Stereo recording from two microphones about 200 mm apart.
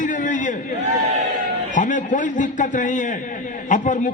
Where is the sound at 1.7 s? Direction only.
40° left (ahead or behind).